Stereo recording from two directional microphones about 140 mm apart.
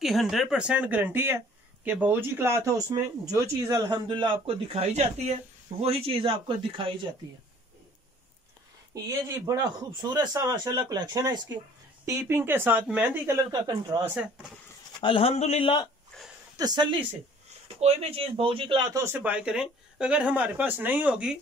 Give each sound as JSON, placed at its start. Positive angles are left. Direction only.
{"t": 0.0, "sound": "speech", "side_deg": 0}
{"t": 8.9, "sound": "speech", "side_deg": -25}
{"t": 13.5, "sound": "speech", "side_deg": -25}
{"t": 15.0, "sound": "speech", "side_deg": 40}
{"t": 16.5, "sound": "speech", "side_deg": -30}
{"t": 17.7, "sound": "speech", "side_deg": -45}
{"t": 18.9, "sound": "speech", "side_deg": -15}